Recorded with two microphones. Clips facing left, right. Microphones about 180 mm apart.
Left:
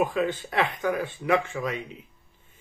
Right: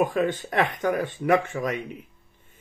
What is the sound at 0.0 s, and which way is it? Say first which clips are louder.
Speech: right 2 dB; 45° right (ahead or behind).